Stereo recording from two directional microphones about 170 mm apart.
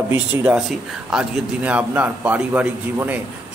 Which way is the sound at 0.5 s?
5° right (ahead or behind).